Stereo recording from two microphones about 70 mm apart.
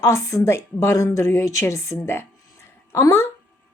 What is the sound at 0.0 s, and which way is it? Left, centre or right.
A woman's voice, left.